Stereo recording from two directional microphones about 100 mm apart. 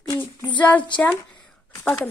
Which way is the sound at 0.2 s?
15° left (ahead or behind).